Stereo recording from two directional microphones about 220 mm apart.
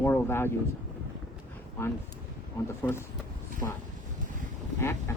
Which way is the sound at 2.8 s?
10° left (ahead or behind).